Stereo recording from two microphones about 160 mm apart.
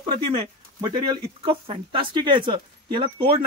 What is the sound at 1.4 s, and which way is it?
Speech, 35° right (ahead or behind).